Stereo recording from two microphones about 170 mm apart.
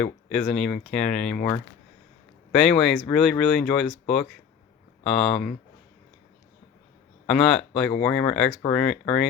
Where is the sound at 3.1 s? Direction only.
Centre (ahead or behind).